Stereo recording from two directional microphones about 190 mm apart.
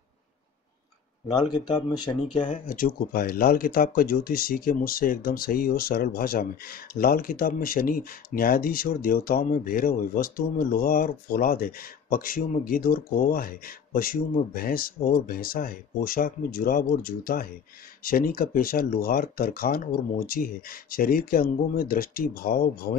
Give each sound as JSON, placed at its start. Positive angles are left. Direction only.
{"t": 1.2, "sound": "speech", "side_deg": 20}
{"t": 2.4, "sound": "speech", "side_deg": 45}